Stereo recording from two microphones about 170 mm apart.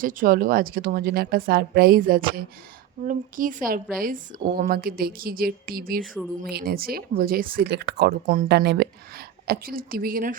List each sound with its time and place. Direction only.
0.0 s speech: 55° right (ahead or behind)